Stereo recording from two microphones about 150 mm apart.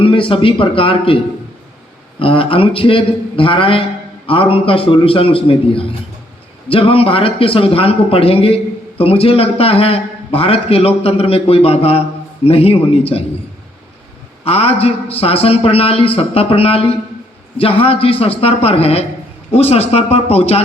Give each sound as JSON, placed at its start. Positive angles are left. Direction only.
{"t": 0.0, "sound": "a man's voice", "side_deg": 35}
{"t": 14.4, "sound": "a man's voice", "side_deg": 40}